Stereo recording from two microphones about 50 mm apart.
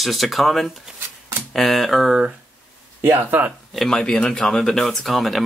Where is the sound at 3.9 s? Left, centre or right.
Centre.